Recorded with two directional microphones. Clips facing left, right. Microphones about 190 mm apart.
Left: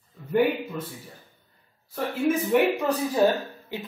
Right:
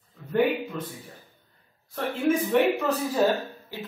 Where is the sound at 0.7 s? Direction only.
5° left (ahead or behind).